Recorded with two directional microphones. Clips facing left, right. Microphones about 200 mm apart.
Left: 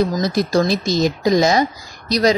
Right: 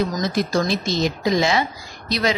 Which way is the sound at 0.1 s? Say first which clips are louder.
Left 4 dB; 40° left (ahead or behind).